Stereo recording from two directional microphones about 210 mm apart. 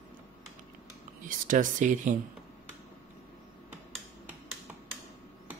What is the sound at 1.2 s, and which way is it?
Speech, 40° right (ahead or behind).